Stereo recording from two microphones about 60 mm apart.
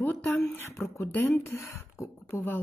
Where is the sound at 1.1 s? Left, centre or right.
Left.